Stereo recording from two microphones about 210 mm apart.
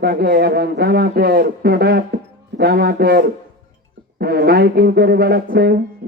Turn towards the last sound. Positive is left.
turn(degrees=-50)  # may be behind; listen again after turning